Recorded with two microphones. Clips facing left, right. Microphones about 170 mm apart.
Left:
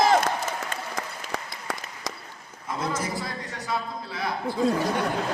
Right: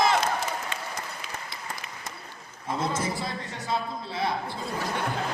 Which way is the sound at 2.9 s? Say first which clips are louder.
Even; 25° right (ahead or behind).